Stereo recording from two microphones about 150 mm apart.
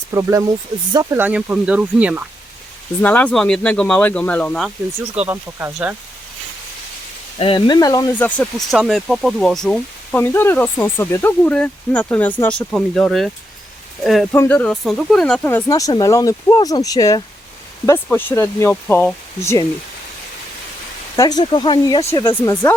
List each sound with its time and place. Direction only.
0.1 s speech: 20° right (ahead or behind)
1.1 s speech: 10° right (ahead or behind)
3.0 s speech: 10° left (ahead or behind)
5.1 s speech: 10° right (ahead or behind)
7.3 s speech: 35° left (ahead or behind)
8.2 s speech: 5° left (ahead or behind)
10.2 s speech: 15° left (ahead or behind)
14.3 s speech: 15° left (ahead or behind)
15.4 s speech: 15° left (ahead or behind)
17.8 s speech: 15° left (ahead or behind)
21.2 s speech: 25° left (ahead or behind)
22.2 s speech: 15° left (ahead or behind)